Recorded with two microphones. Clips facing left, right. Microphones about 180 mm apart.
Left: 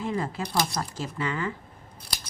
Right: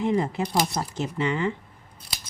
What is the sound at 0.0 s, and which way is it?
Speech, 20° right (ahead or behind).